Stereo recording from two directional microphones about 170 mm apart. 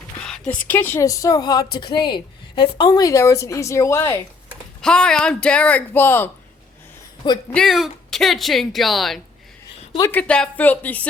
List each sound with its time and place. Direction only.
0.3 s a woman's voice: 5° left (ahead or behind)
4.8 s a woman's voice: 5° left (ahead or behind)
7.5 s a woman's voice: centre (ahead or behind)